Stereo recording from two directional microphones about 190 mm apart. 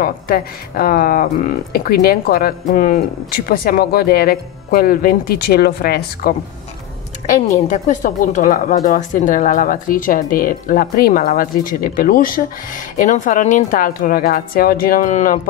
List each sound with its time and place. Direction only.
0.0 s a woman's voice: 50° left (ahead or behind)
7.2 s a woman's voice: 40° left (ahead or behind)